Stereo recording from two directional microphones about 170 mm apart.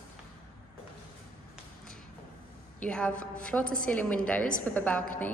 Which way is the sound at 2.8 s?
5° left (ahead or behind).